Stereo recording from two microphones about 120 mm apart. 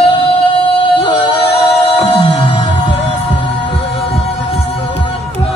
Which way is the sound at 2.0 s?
55° left (ahead or behind).